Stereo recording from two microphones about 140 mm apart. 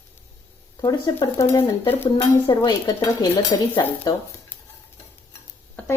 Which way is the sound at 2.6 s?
30° left (ahead or behind).